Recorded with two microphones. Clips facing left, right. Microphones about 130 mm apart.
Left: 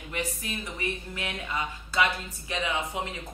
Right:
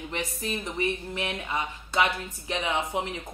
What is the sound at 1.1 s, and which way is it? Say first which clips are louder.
Speech: right 2 dB; 20° right (ahead or behind).